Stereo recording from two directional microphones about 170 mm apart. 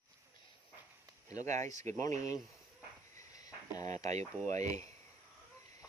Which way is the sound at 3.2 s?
20° left (ahead or behind).